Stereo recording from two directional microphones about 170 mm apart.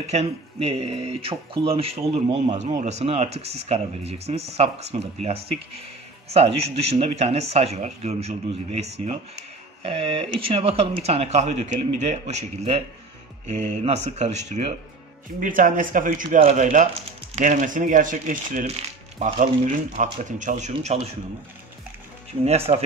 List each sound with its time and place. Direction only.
0.0 s speech: 40° right (ahead or behind)
16.4 s speech: 45° right (ahead or behind)
22.4 s speech: 40° right (ahead or behind)